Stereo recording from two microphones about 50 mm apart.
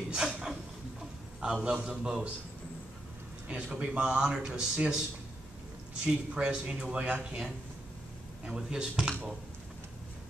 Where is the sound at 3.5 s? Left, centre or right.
Right.